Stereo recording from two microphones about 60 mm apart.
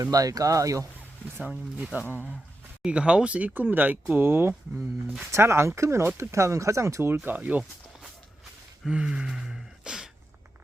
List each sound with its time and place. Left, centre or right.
0.1 s speech: right
1.5 s speech: centre
4.3 s speech: right
5.3 s speech: right
7.3 s speech: right
8.9 s a sound: centre